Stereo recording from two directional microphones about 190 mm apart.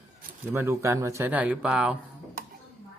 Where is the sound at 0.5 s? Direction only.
15° right (ahead or behind).